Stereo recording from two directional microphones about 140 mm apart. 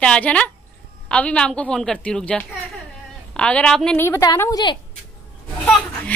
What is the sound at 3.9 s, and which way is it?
Speech, 20° left (ahead or behind).